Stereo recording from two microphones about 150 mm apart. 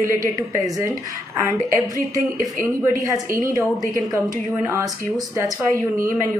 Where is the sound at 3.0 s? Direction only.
20° right (ahead or behind).